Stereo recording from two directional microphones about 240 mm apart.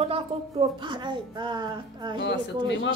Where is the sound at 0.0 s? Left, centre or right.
Right.